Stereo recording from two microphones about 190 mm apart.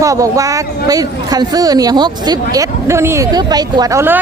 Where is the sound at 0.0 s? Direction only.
15° right (ahead or behind).